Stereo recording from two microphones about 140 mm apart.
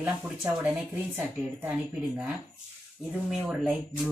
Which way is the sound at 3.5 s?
10° right (ahead or behind).